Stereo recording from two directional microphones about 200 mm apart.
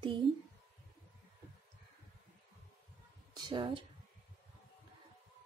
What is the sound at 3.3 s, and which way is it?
Speech, 20° right (ahead or behind).